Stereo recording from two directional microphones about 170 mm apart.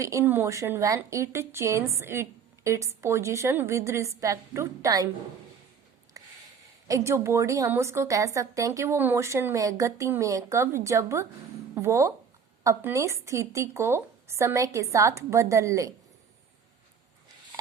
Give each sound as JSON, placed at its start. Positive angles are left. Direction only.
{"t": 0.0, "sound": "a woman's voice", "side_deg": -15}
{"t": 6.2, "sound": "a sound", "side_deg": -20}
{"t": 6.8, "sound": "a woman's voice", "side_deg": -20}